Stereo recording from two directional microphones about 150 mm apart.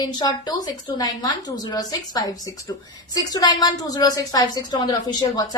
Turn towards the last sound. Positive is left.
turn(degrees=25)  # may be behind; listen again after turning